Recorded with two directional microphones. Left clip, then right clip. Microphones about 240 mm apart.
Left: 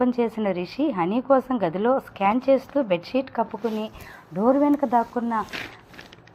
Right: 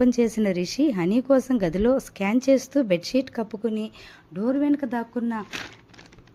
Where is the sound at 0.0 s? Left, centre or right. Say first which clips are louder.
Right 1 dB; right.